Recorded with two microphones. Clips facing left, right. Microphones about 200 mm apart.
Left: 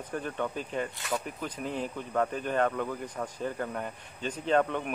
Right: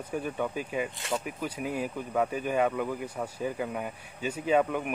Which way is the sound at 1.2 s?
10° right (ahead or behind).